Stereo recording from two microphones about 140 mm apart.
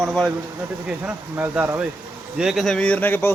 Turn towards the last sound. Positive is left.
turn(degrees=15)  # may be behind; listen again after turning